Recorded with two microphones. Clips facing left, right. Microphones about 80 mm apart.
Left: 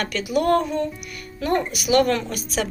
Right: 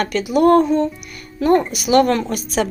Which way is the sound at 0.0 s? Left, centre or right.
Right.